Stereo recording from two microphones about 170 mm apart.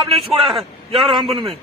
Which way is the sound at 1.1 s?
30° right (ahead or behind).